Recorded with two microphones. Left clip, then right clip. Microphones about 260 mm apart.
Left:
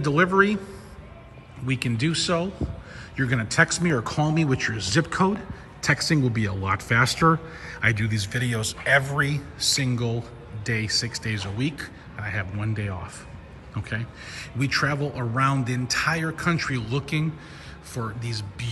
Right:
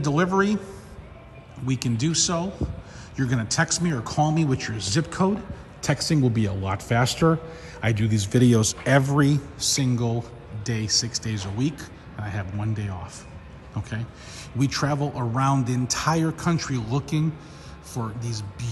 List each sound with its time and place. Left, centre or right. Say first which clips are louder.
0.0 s a man's voice: left 3 dB; centre
1.7 s a man's voice: left 1 dB; centre
7.8 s speech: left 3 dB; right
8.7 s a man's voice: left 1 dB; centre
13.8 s a man's voice: left 7 dB; centre